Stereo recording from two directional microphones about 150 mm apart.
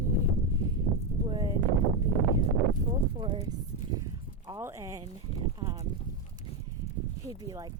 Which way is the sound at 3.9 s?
25° right (ahead or behind).